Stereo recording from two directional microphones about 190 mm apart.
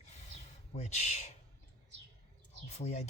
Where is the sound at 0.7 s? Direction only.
35° left (ahead or behind).